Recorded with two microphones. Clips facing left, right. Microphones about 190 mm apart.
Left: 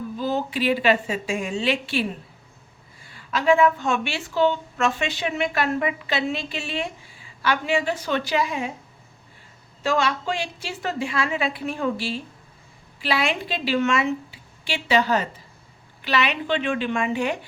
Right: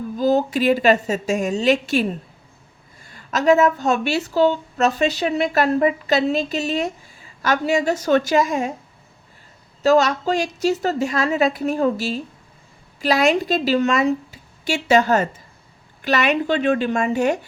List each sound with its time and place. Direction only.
0.2 s a woman's voice: 40° right (ahead or behind)
3.1 s a woman's voice: 45° right (ahead or behind)
9.8 s a woman's voice: 40° right (ahead or behind)